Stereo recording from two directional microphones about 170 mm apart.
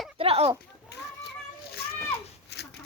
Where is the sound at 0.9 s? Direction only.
80° left.